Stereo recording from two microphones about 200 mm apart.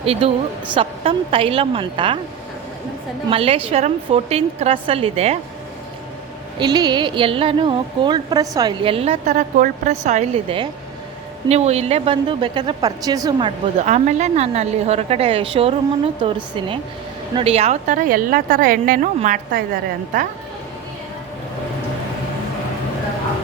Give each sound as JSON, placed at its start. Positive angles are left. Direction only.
{"t": 0.0, "sound": "a woman's voice", "side_deg": -30}
{"t": 3.2, "sound": "a woman's voice", "side_deg": -30}
{"t": 6.6, "sound": "a woman's voice", "side_deg": -20}
{"t": 13.7, "sound": "a woman's voice", "side_deg": -35}